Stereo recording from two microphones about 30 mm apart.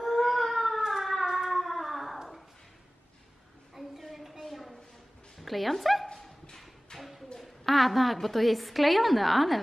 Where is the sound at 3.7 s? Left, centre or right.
Centre.